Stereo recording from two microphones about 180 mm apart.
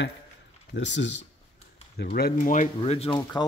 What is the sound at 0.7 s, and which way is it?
Speech, 85° left.